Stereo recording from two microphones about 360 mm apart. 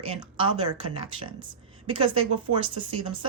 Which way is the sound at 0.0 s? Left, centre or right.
Centre.